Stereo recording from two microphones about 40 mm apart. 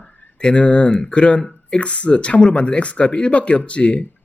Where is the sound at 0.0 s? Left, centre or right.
Left.